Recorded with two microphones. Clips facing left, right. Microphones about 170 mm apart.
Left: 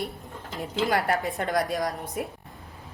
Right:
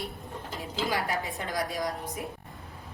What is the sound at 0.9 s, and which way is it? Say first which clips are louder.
Speech: left 5 dB; 60° left (ahead or behind).